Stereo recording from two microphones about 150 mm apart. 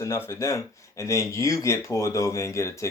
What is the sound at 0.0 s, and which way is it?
Speech, 20° left (ahead or behind).